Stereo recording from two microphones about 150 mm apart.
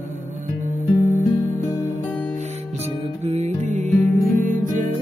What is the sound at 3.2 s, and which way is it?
Music, 45° right (ahead or behind).